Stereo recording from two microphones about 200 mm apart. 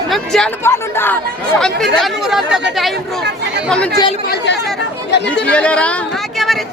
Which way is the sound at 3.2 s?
55° right (ahead or behind).